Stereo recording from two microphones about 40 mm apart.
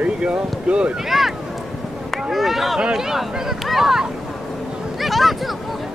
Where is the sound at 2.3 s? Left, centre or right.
Centre.